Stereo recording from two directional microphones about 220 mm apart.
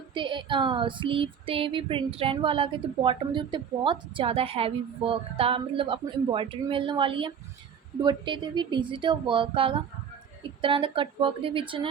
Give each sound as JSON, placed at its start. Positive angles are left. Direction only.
{"t": 0.1, "sound": "female singing", "side_deg": -20}